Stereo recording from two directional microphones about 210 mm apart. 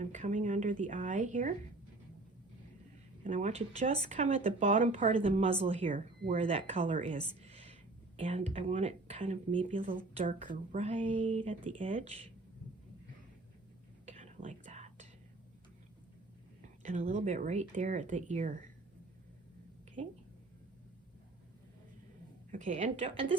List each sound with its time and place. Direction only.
0.0 s speech: 35° right (ahead or behind)
3.2 s speech: 35° right (ahead or behind)
9.6 s speech: 40° right (ahead or behind)
14.0 s whispering: 35° right (ahead or behind)
16.8 s speech: 35° right (ahead or behind)
20.0 s speech: 30° right (ahead or behind)
22.5 s speech: 35° right (ahead or behind)